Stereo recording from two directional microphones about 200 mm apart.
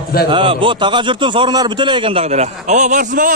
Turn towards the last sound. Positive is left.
turn(degrees=-40)  # may be behind; listen again after turning